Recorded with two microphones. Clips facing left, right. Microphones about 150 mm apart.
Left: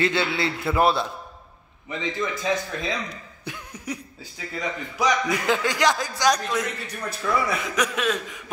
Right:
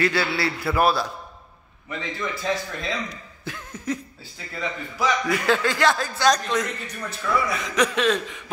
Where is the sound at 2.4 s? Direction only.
15° left (ahead or behind).